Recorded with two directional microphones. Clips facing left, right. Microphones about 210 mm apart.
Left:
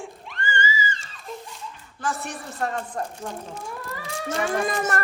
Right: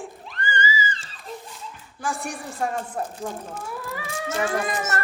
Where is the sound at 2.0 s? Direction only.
10° right (ahead or behind).